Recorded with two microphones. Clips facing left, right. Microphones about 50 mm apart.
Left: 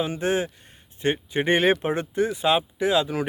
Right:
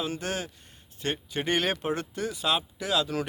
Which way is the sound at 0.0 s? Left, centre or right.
Left.